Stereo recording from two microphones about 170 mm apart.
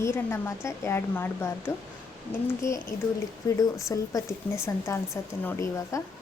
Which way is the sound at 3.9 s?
20° left (ahead or behind).